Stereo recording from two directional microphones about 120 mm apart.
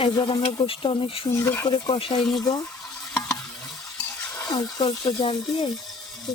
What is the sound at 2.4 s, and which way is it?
Speech, 35° left (ahead or behind).